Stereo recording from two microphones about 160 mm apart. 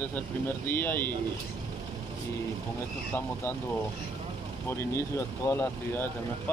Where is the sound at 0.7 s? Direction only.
15° left (ahead or behind).